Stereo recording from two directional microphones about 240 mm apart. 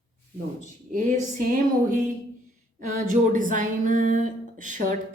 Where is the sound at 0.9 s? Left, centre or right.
Right.